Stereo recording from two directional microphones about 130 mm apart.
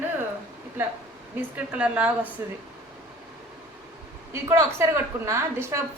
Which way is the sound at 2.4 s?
20° right (ahead or behind).